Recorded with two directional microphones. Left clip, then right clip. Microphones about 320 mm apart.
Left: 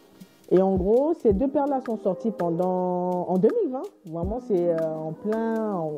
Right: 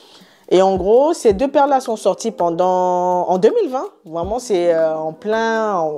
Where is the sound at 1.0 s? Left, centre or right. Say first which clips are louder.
Right 8 dB; centre.